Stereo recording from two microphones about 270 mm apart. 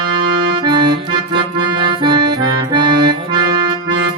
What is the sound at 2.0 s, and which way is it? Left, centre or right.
Accordion, centre.